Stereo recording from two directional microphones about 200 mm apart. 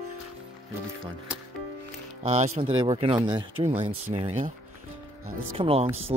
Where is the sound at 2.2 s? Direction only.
35° right (ahead or behind).